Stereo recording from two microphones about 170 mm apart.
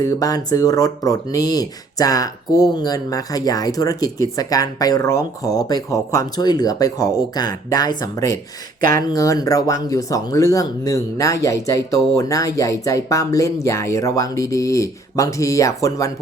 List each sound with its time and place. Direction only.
0.0 s speech: 20° left (ahead or behind)